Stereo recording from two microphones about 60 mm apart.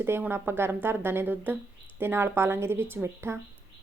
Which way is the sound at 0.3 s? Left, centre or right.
Right.